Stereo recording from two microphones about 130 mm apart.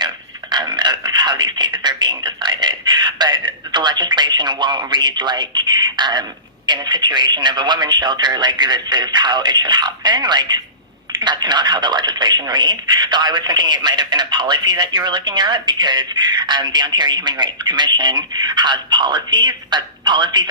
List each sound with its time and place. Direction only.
0.5 s speech: 35° right (ahead or behind)